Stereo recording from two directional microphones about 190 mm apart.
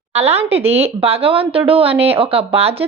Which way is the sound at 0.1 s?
35° right (ahead or behind).